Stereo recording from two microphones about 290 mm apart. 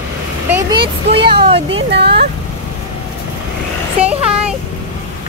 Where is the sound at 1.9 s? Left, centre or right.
Right.